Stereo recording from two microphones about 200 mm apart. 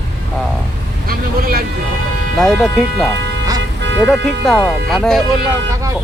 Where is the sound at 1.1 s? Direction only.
50° right (ahead or behind).